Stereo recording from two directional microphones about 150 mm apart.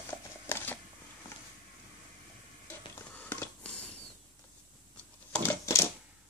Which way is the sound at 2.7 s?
10° left (ahead or behind).